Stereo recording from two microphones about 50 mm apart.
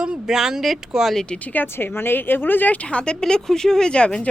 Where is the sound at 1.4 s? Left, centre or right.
Left.